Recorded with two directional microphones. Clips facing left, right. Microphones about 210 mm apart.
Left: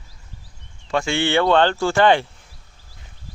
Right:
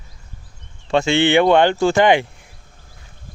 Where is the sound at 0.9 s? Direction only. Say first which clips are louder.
Right 5 dB; 25° right (ahead or behind).